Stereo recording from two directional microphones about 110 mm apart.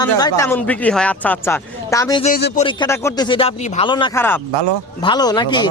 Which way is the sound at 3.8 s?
45° left (ahead or behind).